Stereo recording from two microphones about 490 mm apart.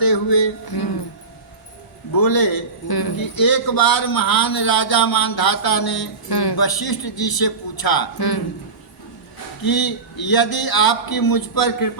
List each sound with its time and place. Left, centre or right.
0.0 s a man's voice: left
2.1 s a man's voice: left
9.6 s a man's voice: left